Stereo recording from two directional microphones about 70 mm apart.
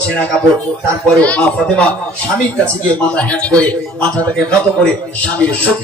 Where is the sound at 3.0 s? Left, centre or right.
Centre.